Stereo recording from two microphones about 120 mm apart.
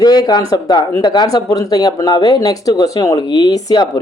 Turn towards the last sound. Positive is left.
turn(degrees=35)  # may be behind; listen again after turning